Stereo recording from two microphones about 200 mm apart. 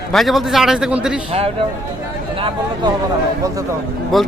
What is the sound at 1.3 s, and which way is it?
Speech, 30° right (ahead or behind).